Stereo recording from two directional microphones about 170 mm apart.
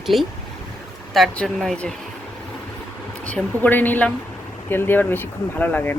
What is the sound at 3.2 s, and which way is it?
A woman's voice, 10° left (ahead or behind).